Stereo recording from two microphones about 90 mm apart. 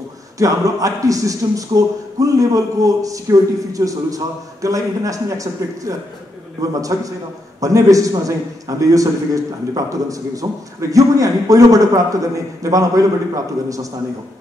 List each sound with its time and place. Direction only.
0.4 s a man's voice: 40° right (ahead or behind)